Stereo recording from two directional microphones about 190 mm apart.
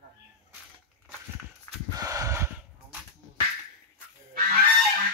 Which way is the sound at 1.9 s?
20° right (ahead or behind).